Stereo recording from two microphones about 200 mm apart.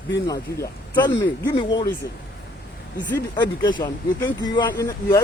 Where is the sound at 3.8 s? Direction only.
20° left (ahead or behind).